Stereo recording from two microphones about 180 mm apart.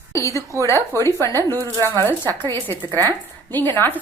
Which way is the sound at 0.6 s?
15° left (ahead or behind).